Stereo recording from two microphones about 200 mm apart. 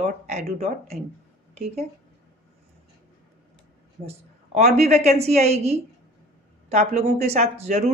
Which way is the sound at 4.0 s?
30° right (ahead or behind).